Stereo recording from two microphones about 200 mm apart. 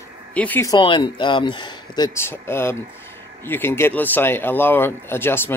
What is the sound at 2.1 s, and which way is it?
Speech, 10° left (ahead or behind).